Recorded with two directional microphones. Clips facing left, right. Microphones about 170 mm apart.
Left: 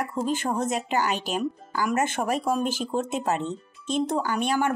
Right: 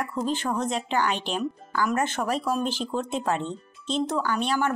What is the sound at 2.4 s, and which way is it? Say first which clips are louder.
Speech: left 2 dB; 50° left (ahead or behind).